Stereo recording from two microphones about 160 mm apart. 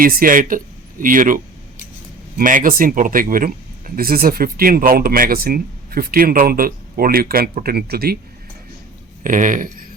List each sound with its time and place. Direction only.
0.0 s speech: 60° right (ahead or behind)
2.4 s speech: 55° right (ahead or behind); by 8.2 s 75° right (ahead or behind)
9.2 s speech: 55° right (ahead or behind)